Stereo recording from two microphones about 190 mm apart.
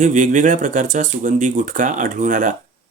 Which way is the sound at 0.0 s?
40° right (ahead or behind).